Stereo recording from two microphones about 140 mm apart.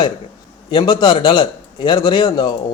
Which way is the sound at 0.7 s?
35° left (ahead or behind).